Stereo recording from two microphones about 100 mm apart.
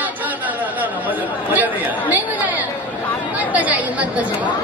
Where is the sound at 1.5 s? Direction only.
15° right (ahead or behind).